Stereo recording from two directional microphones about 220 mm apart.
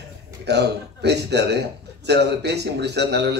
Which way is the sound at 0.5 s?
50° right (ahead or behind).